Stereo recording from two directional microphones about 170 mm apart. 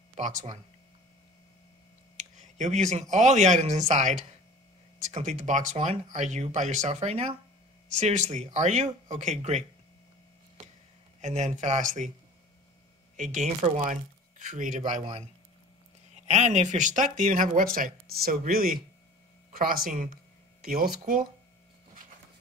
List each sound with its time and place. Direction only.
0.1 s speech: 45° right (ahead or behind)
2.1 s speech: 45° right (ahead or behind)
11.1 s speech: 40° right (ahead or behind)
13.1 s a man's voice: 45° right (ahead or behind)
16.3 s speech: 45° right (ahead or behind)